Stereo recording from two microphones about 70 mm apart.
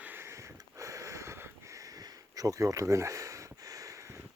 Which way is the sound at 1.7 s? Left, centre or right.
Right.